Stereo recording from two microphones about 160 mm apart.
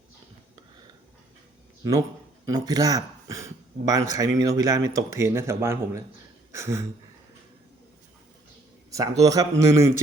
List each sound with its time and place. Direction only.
1.8 s speech: 20° right (ahead or behind)
8.9 s speech: 20° right (ahead or behind)